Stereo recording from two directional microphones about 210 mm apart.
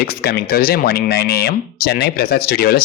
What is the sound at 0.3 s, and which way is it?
Speech, 45° left (ahead or behind).